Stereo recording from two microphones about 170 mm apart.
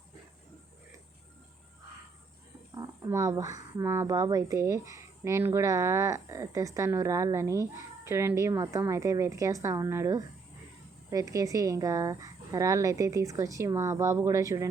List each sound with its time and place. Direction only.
2.7 s speech: 20° right (ahead or behind)